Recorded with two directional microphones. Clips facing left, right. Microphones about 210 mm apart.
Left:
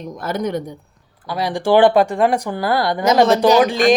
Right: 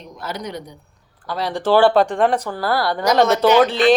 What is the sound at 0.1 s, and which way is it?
Speech, 50° left (ahead or behind).